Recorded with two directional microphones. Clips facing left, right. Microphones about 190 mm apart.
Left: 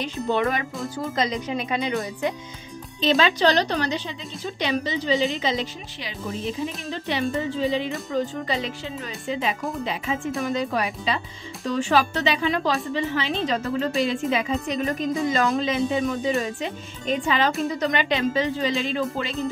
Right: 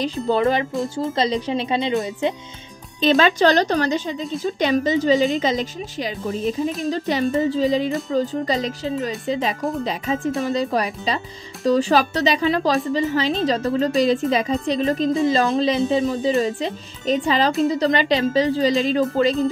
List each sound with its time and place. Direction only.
0.0 s speech: 35° right (ahead or behind)
3.0 s speech: 50° right (ahead or behind)